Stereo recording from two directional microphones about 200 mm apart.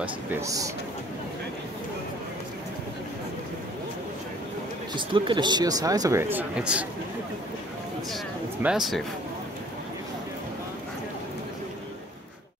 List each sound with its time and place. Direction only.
0.0 s speech: 10° right (ahead or behind)
4.9 s speech: 25° right (ahead or behind); by 6.9 s 5° right (ahead or behind)
8.6 s speech: centre (ahead or behind)